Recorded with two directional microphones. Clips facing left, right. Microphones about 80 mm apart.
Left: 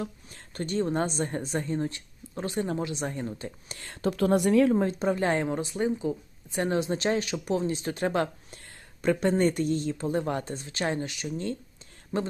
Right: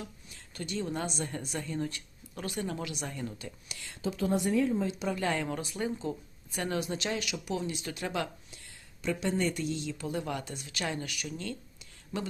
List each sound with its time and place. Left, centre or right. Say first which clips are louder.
0.0 s speech: left 8 dB; left
4.9 s speech: left 6 dB; left